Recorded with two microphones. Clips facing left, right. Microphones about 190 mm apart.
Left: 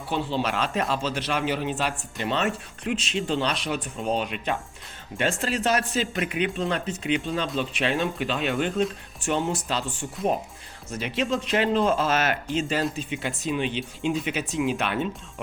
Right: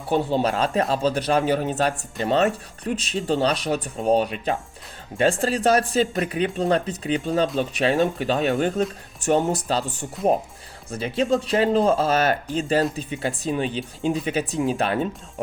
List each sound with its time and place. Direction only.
0.1 s speech: 50° right (ahead or behind)
0.5 s speech: 35° right (ahead or behind)
4.2 s speech: 35° right (ahead or behind)